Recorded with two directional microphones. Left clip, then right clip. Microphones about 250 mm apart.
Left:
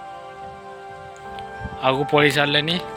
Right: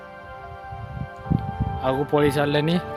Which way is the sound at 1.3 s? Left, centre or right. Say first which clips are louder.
Right 3 dB; centre.